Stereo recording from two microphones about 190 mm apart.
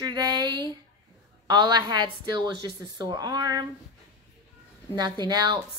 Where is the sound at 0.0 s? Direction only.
20° right (ahead or behind).